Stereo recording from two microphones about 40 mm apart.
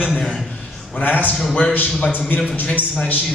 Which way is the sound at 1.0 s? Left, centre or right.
Left.